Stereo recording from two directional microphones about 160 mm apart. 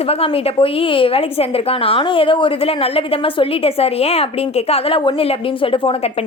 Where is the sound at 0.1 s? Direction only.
40° left (ahead or behind).